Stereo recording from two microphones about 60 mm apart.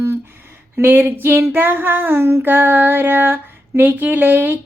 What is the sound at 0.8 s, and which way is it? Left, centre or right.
Female singing, right.